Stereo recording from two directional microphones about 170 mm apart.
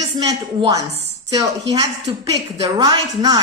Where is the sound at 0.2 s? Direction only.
20° right (ahead or behind).